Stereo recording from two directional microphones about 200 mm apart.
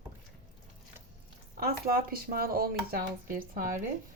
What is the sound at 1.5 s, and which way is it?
Speech, 50° right (ahead or behind).